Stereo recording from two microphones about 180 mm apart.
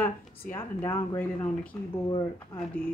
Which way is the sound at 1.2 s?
10° left (ahead or behind).